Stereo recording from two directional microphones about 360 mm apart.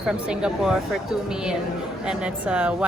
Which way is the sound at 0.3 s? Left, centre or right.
Centre.